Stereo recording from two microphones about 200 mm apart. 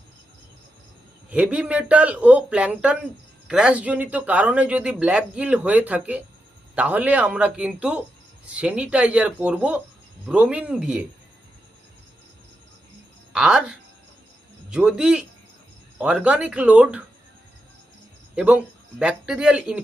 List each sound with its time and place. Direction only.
1.3 s a man's voice: 5° right (ahead or behind)
13.3 s a man's voice: centre (ahead or behind)
18.3 s a man's voice: 5° right (ahead or behind)